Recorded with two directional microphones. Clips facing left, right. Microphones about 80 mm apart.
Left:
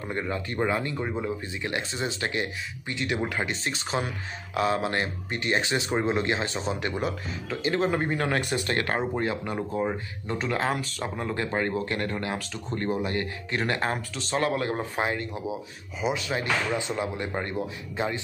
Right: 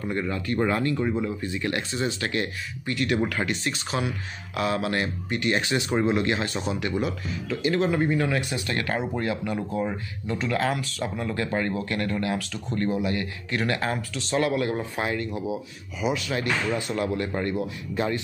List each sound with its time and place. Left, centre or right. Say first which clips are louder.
0.1 s speech: right 2 dB; left
0.6 s speech: right 3 dB; centre; by 9.0 s left
9.1 s speech: right 1 dB; left